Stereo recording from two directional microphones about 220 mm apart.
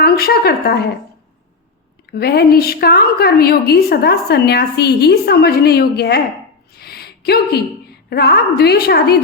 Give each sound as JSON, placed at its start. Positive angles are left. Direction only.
{"t": 0.0, "sound": "a woman's voice", "side_deg": 45}
{"t": 2.0, "sound": "a woman's voice", "side_deg": 45}
{"t": 6.7, "sound": "a sound", "side_deg": 45}
{"t": 8.1, "sound": "a woman's voice", "side_deg": 45}